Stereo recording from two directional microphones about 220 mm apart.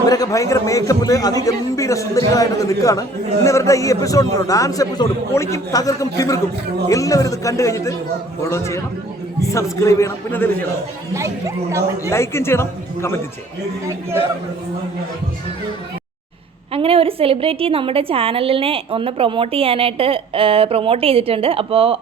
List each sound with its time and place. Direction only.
0.0 s a man's voice: 15° left (ahead or behind)
11.1 s a woman's voice: 15° right (ahead or behind)
12.1 s a man's voice: 10° left (ahead or behind)
16.7 s a woman's voice: 25° right (ahead or behind)